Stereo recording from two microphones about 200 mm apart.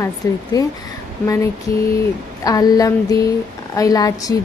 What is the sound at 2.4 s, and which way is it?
A woman's voice, 20° left (ahead or behind).